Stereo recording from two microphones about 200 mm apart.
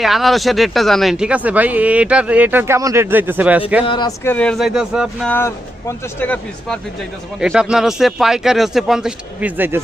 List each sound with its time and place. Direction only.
0.0 s speech: centre (ahead or behind)
3.8 s speech: 25° left (ahead or behind)
4.2 s speech: 10° left (ahead or behind)
6.1 s speech: 5° left (ahead or behind)
7.3 s speech: 5° right (ahead or behind)